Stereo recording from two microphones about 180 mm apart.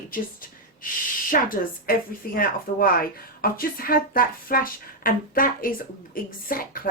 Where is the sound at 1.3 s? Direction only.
50° left (ahead or behind).